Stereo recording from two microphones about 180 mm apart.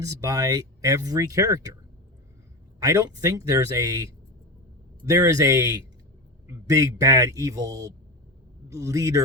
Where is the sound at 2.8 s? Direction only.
20° right (ahead or behind).